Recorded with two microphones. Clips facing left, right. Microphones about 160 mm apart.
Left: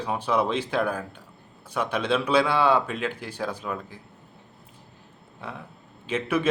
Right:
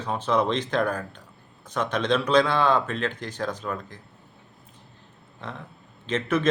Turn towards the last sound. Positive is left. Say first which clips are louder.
# right 1 dB
turn(degrees=10)  # may be behind; listen again after turning